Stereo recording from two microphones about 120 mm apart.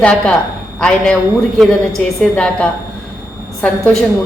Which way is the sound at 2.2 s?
10° left (ahead or behind).